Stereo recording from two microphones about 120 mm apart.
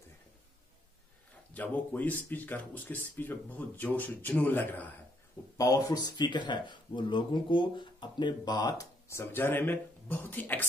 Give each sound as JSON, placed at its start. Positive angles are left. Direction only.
{"t": 1.5, "sound": "speech", "side_deg": 15}
{"t": 5.6, "sound": "speech", "side_deg": 30}
{"t": 9.1, "sound": "speech", "side_deg": 20}